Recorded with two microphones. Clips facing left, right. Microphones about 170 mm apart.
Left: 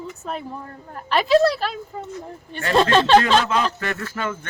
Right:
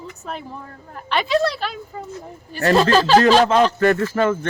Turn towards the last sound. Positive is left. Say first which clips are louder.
# right 10 dB
turn(degrees=-45)  # may be behind; listen again after turning